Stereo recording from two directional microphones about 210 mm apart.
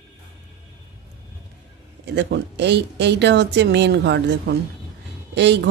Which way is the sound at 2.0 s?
55° right (ahead or behind).